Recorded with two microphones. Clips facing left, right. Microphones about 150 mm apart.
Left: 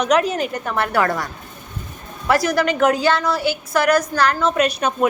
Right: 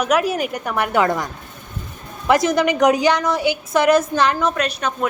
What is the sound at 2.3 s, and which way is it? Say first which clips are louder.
A woman's voice: right 2 dB; 20° right (ahead or behind).